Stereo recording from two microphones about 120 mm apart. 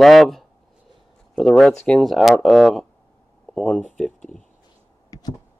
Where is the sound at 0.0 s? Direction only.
Centre (ahead or behind).